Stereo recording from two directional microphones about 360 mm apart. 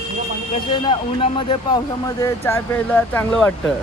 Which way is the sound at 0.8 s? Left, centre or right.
Centre.